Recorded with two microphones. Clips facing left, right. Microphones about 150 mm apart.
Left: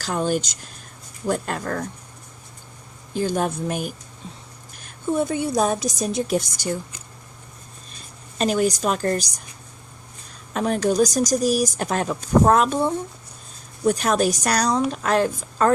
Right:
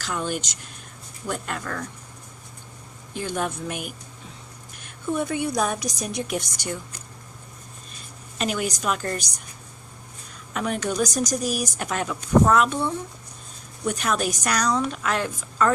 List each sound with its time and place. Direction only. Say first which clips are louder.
0.0 s speech: left 5 dB; 40° left (ahead or behind)
3.2 s a woman's voice: left 5 dB; 35° left (ahead or behind)
8.4 s speech: left 6 dB; 35° left (ahead or behind)
10.5 s speech: left 5 dB; 35° left (ahead or behind)